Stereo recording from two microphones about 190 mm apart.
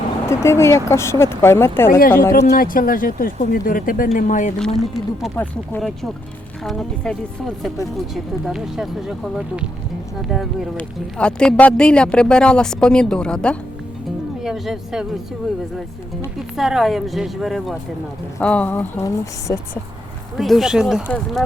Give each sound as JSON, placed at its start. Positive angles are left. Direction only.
{"t": 0.3, "sound": "speech", "side_deg": 15}
{"t": 1.9, "sound": "speech", "side_deg": 50}
{"t": 4.6, "sound": "speech", "side_deg": 0}
{"t": 16.6, "sound": "speech", "side_deg": 0}
{"t": 20.3, "sound": "speech", "side_deg": 0}